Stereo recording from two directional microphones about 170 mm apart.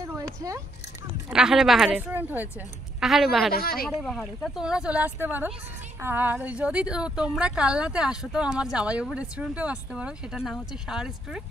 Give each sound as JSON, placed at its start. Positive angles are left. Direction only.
{"t": 0.0, "sound": "a sound", "side_deg": -20}
{"t": 1.3, "sound": "a woman's voice", "side_deg": -5}
{"t": 3.5, "sound": "speech", "side_deg": 60}
{"t": 4.0, "sound": "a woman's voice", "side_deg": 0}